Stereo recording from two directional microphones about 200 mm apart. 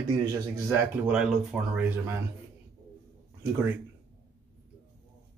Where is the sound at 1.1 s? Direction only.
5° right (ahead or behind).